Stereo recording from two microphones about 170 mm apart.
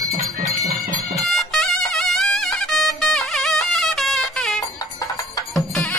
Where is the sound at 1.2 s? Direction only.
Centre (ahead or behind).